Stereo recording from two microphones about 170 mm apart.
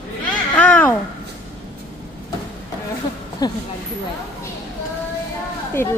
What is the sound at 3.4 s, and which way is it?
Speech, 25° left (ahead or behind).